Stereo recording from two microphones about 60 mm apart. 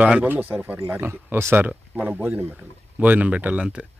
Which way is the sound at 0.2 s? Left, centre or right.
Right.